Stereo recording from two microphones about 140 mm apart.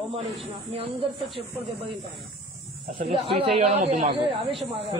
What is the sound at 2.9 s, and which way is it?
Speech, 40° right (ahead or behind).